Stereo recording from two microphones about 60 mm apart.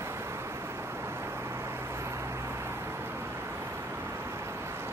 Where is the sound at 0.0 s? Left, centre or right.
Right.